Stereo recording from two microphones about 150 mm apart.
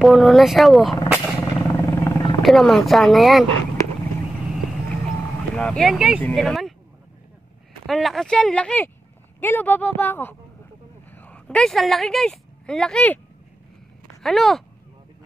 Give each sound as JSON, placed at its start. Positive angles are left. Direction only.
{"t": 0.0, "sound": "speech", "side_deg": 0}
{"t": 1.4, "sound": "vehicle", "side_deg": 20}
{"t": 2.4, "sound": "speech", "side_deg": 0}
{"t": 5.6, "sound": "speech", "side_deg": 5}
{"t": 7.8, "sound": "speech", "side_deg": 0}
{"t": 14.2, "sound": "speech", "side_deg": 0}